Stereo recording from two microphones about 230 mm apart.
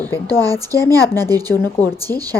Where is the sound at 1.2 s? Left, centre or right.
Centre.